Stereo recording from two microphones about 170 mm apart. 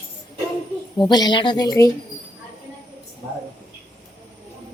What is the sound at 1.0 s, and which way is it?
Speech, 25° left (ahead or behind).